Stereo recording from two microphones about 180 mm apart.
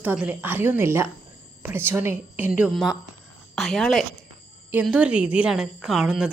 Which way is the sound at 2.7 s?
Centre (ahead or behind).